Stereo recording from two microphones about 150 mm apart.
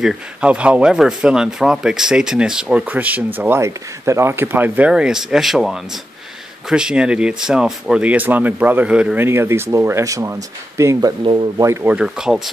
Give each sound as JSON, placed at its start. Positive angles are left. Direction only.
{"t": 0.0, "sound": "speech", "side_deg": -5}
{"t": 11.2, "sound": "speech", "side_deg": -35}
{"t": 11.6, "sound": "speech", "side_deg": -15}